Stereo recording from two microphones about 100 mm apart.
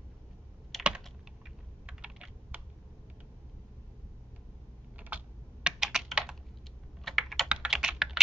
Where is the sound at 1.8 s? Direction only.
10° right (ahead or behind).